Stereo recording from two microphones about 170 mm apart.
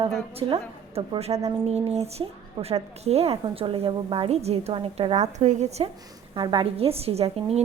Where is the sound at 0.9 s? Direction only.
35° right (ahead or behind).